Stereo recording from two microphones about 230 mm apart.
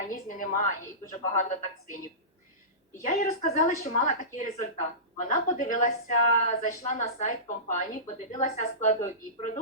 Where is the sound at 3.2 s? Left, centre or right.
Left.